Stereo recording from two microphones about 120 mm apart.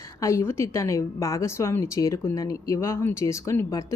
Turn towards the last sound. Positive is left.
turn(degrees=25)  # may be behind; listen again after turning